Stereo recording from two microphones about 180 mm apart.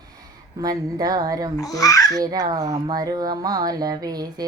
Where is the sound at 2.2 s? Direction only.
20° right (ahead or behind).